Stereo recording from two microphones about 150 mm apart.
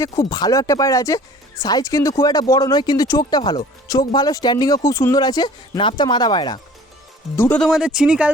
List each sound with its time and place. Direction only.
0.0 s speech: 25° left (ahead or behind)
7.3 s speech: 15° left (ahead or behind)
7.6 s speech: 5° right (ahead or behind)